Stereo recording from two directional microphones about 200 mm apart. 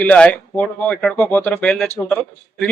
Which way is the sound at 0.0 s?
5° left (ahead or behind).